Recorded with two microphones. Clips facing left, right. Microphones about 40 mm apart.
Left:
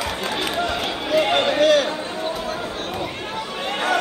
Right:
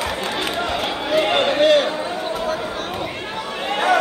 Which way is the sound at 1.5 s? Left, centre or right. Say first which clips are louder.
Right 2 dB; right.